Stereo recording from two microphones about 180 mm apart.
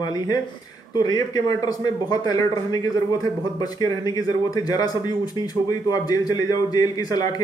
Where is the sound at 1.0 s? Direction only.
20° left (ahead or behind).